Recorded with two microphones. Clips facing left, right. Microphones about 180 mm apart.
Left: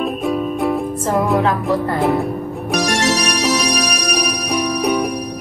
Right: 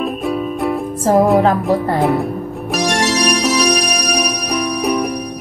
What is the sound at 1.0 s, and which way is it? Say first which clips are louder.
Music: right 8 dB; 40° right (ahead or behind).